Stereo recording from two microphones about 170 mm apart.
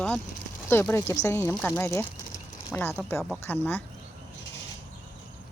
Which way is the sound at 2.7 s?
15° left (ahead or behind).